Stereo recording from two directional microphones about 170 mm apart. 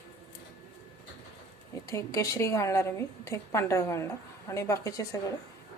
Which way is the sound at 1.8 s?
20° left (ahead or behind).